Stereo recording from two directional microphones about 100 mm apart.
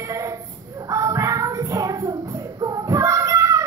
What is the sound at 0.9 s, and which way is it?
Child singing, 30° right (ahead or behind).